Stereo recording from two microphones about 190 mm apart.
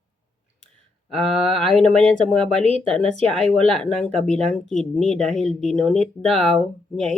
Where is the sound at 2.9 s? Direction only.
30° right (ahead or behind).